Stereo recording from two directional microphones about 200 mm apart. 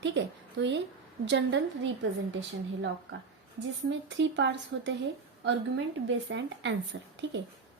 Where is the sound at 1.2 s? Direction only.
65° right (ahead or behind).